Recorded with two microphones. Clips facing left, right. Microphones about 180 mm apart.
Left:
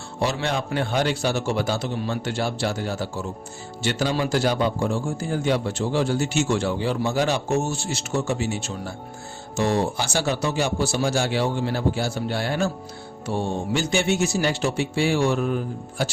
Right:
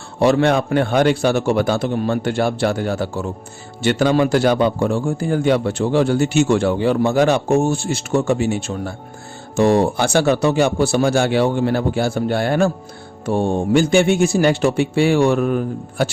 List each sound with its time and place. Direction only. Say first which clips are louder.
0.2 s a man's voice: right 10 dB; 60° right (ahead or behind)